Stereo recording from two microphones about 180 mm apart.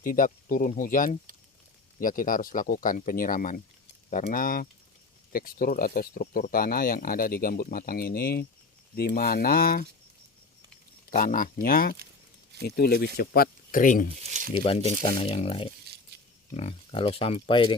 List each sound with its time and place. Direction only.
0.0 s speech: 50° left (ahead or behind)
11.1 s speech: 50° left (ahead or behind)
15.0 s speech: 35° left (ahead or behind)